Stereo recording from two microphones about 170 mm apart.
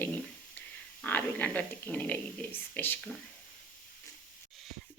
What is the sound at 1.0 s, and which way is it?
Speech, 10° left (ahead or behind).